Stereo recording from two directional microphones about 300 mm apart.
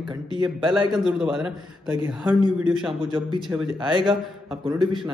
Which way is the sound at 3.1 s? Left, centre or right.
Centre.